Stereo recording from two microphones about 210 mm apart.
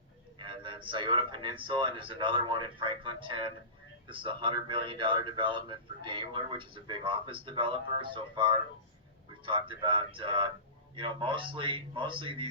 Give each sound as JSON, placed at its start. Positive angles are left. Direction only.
{"t": 0.3, "sound": "a man's voice", "side_deg": -25}